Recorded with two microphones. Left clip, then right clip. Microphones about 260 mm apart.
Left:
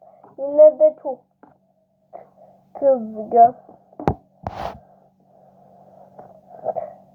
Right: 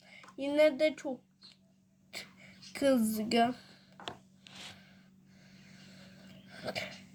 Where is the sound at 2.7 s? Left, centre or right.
Right.